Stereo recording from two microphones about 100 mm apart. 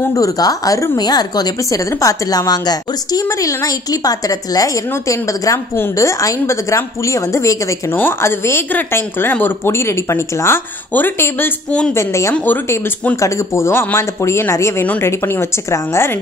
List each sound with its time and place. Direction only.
0.1 s a woman's voice: 35° left (ahead or behind)